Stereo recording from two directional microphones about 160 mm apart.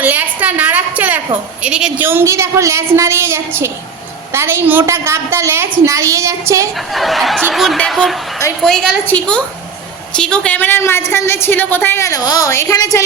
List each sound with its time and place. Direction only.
0.0 s a sound: 10° right (ahead or behind)
1.6 s a woman's voice: 5° right (ahead or behind)
6.9 s a woman's voice: centre (ahead or behind); by 13.0 s 20° left (ahead or behind)